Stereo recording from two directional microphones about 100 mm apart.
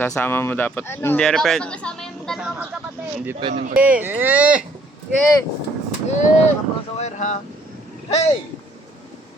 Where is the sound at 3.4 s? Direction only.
60° right (ahead or behind).